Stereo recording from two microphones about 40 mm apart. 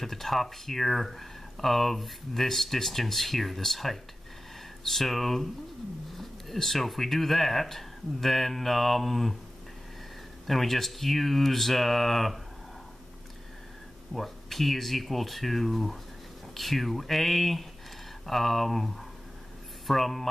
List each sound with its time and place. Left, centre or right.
0.0 s speech: centre
10.4 s speech: centre
14.1 s speech: centre